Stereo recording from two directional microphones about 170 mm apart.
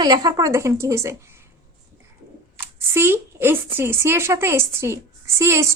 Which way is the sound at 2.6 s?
15° right (ahead or behind).